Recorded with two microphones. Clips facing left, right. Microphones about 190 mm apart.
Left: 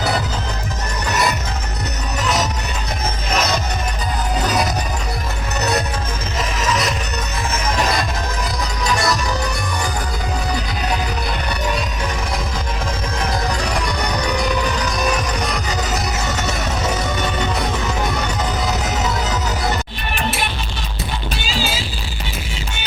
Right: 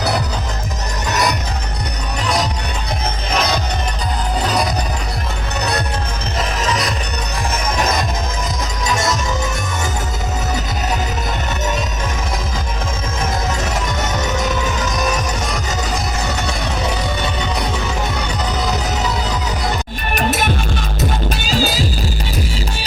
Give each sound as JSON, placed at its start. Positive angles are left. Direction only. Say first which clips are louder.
{"t": 1.1, "sound": "music", "louder": "right 1 dB", "side_deg": 0}
{"t": 13.6, "sound": "music", "louder": "even", "side_deg": -20}
{"t": 20.1, "sound": "music", "louder": "right 6 dB", "side_deg": -40}